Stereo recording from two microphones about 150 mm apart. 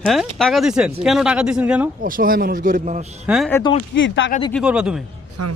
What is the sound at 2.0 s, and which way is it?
A man's voice, 70° right (ahead or behind).